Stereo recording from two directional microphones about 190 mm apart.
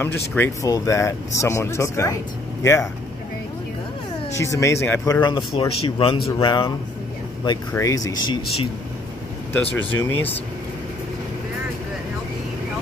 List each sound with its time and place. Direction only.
0.3 s speech: 15° left (ahead or behind)
4.3 s speech: 15° left (ahead or behind)
7.7 s speech: 15° left (ahead or behind)
9.5 s speech: 10° left (ahead or behind)